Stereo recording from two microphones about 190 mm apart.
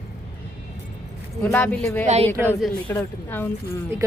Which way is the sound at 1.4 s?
10° left (ahead or behind).